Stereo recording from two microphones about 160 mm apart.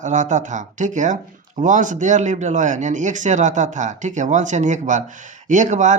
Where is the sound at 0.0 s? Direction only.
50° right (ahead or behind).